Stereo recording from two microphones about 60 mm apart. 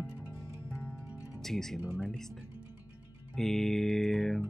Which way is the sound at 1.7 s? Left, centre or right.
Centre.